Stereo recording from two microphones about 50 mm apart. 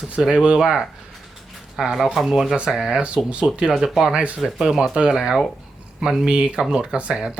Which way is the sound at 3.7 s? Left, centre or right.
Centre.